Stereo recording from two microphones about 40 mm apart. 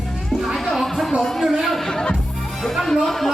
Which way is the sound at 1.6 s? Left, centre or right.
Centre.